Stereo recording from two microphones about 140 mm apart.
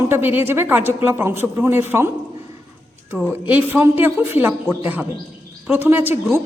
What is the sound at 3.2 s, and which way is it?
A woman's voice, 10° right (ahead or behind).